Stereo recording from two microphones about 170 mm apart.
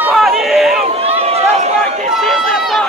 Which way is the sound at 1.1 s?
35° right (ahead or behind).